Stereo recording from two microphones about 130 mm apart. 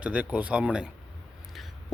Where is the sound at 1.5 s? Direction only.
Centre (ahead or behind).